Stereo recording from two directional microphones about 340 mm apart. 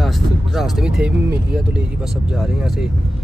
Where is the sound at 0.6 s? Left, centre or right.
Centre.